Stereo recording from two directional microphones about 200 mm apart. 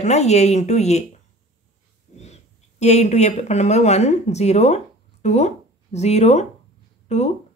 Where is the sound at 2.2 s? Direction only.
35° left (ahead or behind).